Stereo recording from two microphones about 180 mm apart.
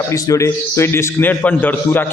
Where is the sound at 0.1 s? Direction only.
15° left (ahead or behind).